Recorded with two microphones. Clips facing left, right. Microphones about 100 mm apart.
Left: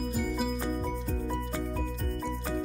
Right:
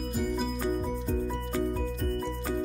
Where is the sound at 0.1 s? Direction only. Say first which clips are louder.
Right 4 dB; centre (ahead or behind).